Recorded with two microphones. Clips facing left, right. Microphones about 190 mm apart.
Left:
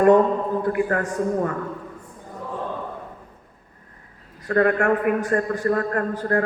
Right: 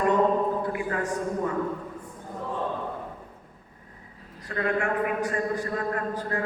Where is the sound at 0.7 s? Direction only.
55° left (ahead or behind).